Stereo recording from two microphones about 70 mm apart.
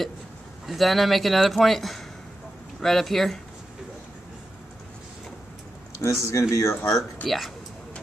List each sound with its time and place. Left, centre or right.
0.7 s a man's voice: centre
6.0 s speech: left
7.2 s a man's voice: centre